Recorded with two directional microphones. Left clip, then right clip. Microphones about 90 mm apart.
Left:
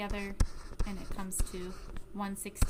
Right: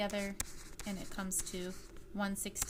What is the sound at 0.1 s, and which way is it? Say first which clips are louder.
A woman's voice: even; centre (ahead or behind).